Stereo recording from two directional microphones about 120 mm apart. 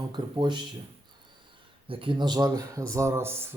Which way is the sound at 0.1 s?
40° right (ahead or behind).